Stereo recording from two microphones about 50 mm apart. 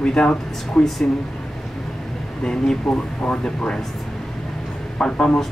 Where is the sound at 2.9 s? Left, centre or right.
Centre.